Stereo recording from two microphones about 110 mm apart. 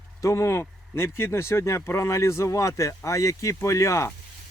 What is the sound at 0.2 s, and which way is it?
Speech, 25° left (ahead or behind).